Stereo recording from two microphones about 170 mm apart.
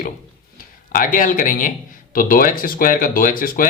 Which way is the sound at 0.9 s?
50° left (ahead or behind).